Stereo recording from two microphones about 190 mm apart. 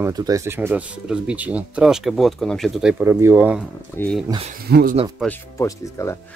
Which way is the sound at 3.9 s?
5° left (ahead or behind).